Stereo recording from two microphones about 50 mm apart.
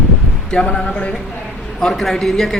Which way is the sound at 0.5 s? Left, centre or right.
Centre.